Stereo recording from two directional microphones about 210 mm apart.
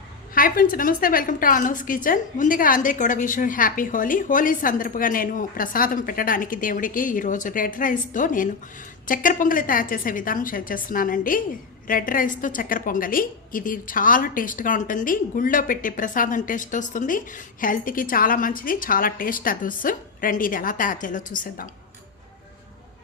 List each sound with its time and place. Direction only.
0.3 s a woman's voice: 40° left (ahead or behind)